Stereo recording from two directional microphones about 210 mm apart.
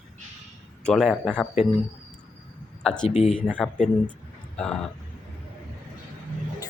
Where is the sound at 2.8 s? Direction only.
Centre (ahead or behind).